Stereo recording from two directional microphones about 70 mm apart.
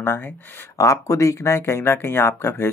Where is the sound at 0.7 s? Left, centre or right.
Left.